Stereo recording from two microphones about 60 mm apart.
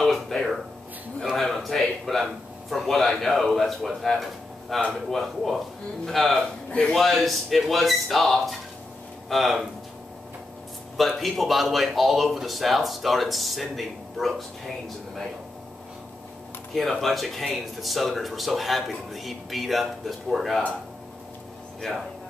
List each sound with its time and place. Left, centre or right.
0.0 s a sound: centre
1.3 s a man's voice: centre
11.0 s speech: centre
17.0 s speech: centre
21.8 s speech: centre